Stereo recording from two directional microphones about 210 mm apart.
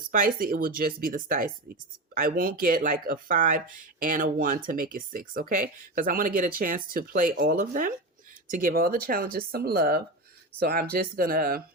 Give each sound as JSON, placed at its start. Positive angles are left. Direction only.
{"t": 0.1, "sound": "speech", "side_deg": -40}